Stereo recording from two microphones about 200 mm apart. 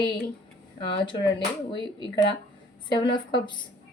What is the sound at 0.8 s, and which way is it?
Speech, 25° left (ahead or behind).